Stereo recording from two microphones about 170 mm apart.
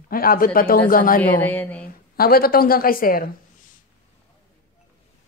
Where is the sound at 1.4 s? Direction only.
10° left (ahead or behind).